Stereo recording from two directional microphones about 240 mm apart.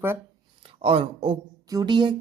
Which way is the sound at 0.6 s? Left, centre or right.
Right.